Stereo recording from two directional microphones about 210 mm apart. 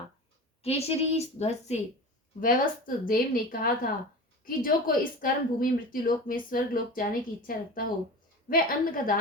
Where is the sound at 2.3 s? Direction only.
40° left (ahead or behind).